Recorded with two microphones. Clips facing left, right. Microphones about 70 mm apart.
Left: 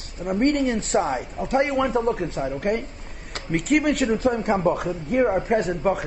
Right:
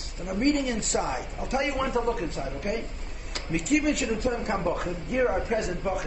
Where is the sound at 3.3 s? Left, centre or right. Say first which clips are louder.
Left 4 dB; left.